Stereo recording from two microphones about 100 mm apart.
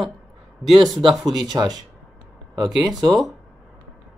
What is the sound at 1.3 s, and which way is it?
Speech, 45° right (ahead or behind).